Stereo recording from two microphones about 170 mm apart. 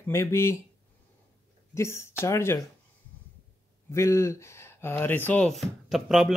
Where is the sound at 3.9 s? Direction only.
15° left (ahead or behind).